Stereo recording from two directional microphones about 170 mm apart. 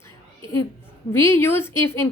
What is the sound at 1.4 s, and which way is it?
Speech, 15° left (ahead or behind).